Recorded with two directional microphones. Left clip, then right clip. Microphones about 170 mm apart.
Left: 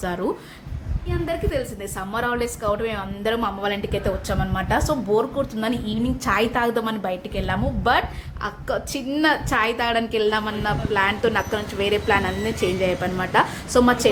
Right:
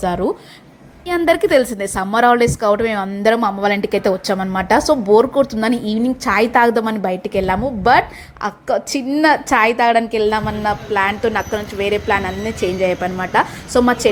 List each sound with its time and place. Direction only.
0.0 s a woman's voice: 30° right (ahead or behind)
1.0 s a woman's voice: 55° right (ahead or behind); by 14.1 s 30° right (ahead or behind)